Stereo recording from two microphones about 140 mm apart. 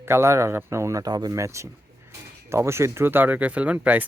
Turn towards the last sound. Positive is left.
turn(degrees=-10)  # may be behind; listen again after turning